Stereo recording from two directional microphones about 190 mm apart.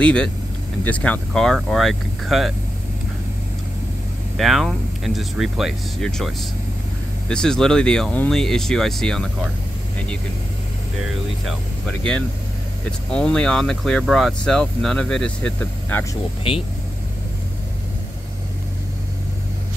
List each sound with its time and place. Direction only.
0.0 s speech: 5° left (ahead or behind)
4.4 s speech: centre (ahead or behind)
11.1 s speech: centre (ahead or behind)
13.1 s speech: 5° left (ahead or behind)
16.5 s speech: 25° left (ahead or behind)